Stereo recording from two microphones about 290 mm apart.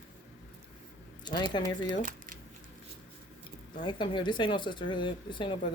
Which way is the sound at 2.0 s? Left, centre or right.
Right.